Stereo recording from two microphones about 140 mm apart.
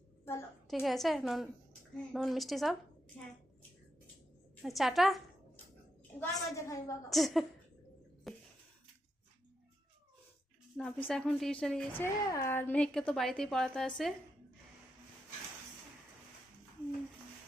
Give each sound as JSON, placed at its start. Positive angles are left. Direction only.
{"t": 0.7, "sound": "a woman's voice", "side_deg": 0}
{"t": 4.6, "sound": "a woman's voice", "side_deg": 0}
{"t": 6.3, "sound": "a woman's voice", "side_deg": 20}
{"t": 7.1, "sound": "a woman's voice", "side_deg": 0}
{"t": 8.3, "sound": "a sound", "side_deg": 0}
{"t": 10.8, "sound": "a woman's voice", "side_deg": 5}
{"t": 11.9, "sound": "a woman's voice", "side_deg": 20}